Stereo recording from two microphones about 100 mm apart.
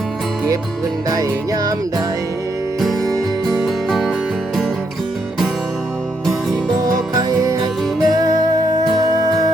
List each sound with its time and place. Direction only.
2.8 s music: centre (ahead or behind)
6.8 s music: 35° right (ahead or behind)